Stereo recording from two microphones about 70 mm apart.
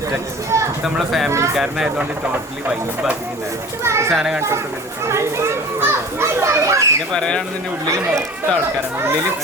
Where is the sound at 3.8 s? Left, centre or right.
Right.